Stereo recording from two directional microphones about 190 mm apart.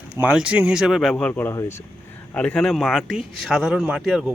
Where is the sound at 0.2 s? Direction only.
5° right (ahead or behind).